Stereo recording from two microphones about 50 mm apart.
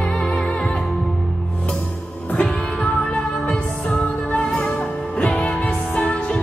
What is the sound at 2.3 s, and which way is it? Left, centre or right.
Music, left.